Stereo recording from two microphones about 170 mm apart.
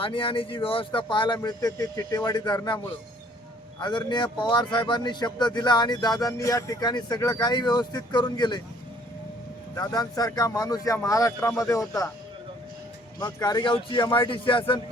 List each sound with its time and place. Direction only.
0.0 s speech: 30° left (ahead or behind)
9.7 s speech: 20° left (ahead or behind)
13.1 s speech: 20° left (ahead or behind)